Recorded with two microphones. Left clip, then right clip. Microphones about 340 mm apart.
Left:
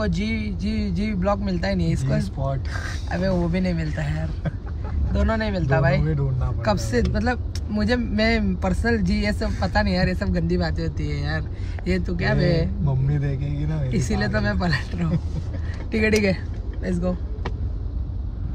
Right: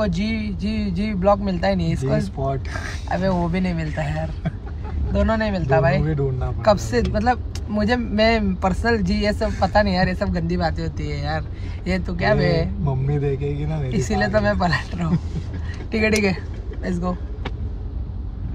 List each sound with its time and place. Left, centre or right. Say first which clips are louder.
0.0 s speech: right 3 dB; centre
2.4 s a man's voice: right 3 dB; centre
3.1 s speech: right 3 dB; centre
13.3 s a man's voice: right 6 dB; centre
13.9 s speech: right 6 dB; centre